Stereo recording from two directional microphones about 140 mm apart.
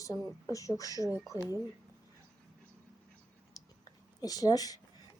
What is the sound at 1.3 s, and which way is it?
Speech, 20° right (ahead or behind).